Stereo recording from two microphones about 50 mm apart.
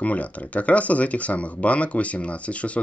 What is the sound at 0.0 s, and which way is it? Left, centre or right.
Speech, left.